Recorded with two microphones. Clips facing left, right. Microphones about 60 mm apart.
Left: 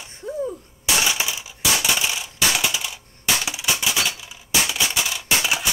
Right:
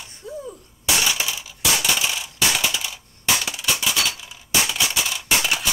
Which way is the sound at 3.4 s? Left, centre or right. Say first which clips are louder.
Even; centre.